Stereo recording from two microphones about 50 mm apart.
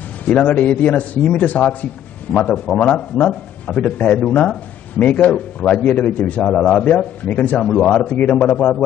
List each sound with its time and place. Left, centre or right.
0.3 s a man's voice: left
2.4 s a man's voice: centre
6.5 s a man's voice: centre
7.2 s a man's voice: left